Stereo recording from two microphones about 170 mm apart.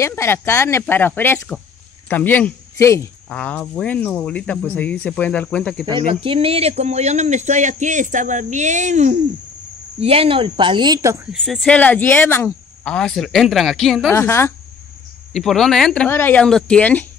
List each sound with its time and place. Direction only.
0.0 s speech: 15° left (ahead or behind)
5.9 s speech: 30° right (ahead or behind)
11.3 s speech: centre (ahead or behind)
14.1 s speech: 15° left (ahead or behind)
15.3 s speech: centre (ahead or behind)